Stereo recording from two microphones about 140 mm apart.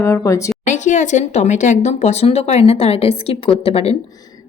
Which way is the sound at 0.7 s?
65° left (ahead or behind).